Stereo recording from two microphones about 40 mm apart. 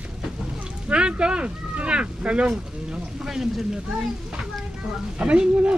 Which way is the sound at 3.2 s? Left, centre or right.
Centre.